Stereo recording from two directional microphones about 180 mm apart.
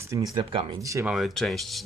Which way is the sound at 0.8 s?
15° right (ahead or behind).